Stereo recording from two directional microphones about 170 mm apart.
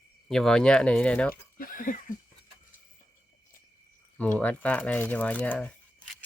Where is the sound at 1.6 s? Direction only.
55° left (ahead or behind).